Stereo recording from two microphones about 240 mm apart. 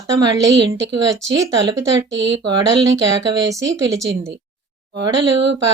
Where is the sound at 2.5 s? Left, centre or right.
Centre.